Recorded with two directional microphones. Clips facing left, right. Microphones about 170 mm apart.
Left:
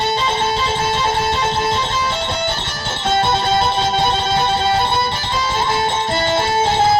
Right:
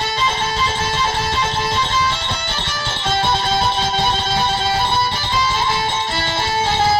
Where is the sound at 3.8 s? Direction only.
55° left (ahead or behind).